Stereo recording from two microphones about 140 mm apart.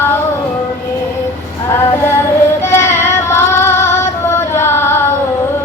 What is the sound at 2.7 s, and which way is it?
Child singing, 15° left (ahead or behind).